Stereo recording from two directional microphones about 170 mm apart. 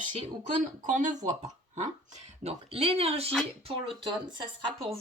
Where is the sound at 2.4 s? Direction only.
35° right (ahead or behind).